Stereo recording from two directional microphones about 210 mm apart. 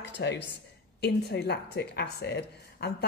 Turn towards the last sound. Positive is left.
turn(degrees=50)  # may be behind; listen again after turning